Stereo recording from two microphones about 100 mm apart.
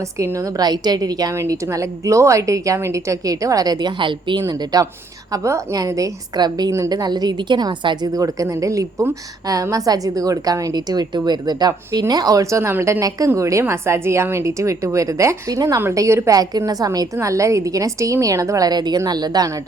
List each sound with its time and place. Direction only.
0.2 s a woman's voice: 30° right (ahead or behind); by 8.1 s 45° right (ahead or behind)
8.1 s a woman's voice: 35° right (ahead or behind)